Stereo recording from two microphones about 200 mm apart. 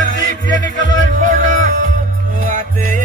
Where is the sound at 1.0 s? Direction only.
40° right (ahead or behind).